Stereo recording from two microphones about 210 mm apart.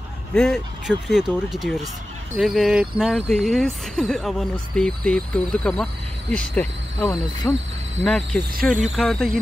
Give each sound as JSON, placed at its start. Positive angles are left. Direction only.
{"t": 0.3, "sound": "speech", "side_deg": 0}